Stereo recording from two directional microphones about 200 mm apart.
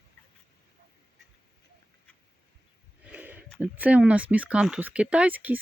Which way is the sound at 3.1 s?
5° right (ahead or behind).